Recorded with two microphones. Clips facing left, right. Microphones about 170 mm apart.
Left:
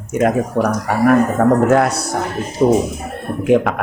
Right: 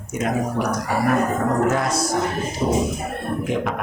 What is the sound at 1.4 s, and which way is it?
Speech, 60° left (ahead or behind).